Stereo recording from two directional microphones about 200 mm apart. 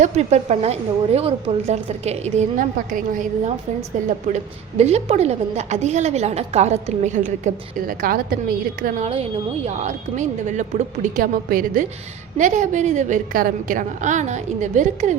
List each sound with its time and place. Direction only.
0.0 s a woman's voice: 35° right (ahead or behind)
9.6 s a woman's voice: 35° right (ahead or behind)